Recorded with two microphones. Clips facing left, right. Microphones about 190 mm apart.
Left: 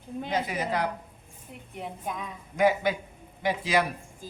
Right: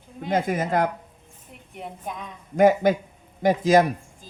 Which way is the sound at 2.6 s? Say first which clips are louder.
Right 6 dB; 45° right (ahead or behind).